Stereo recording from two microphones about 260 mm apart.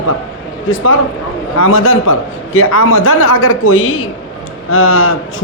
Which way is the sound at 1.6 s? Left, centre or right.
Left.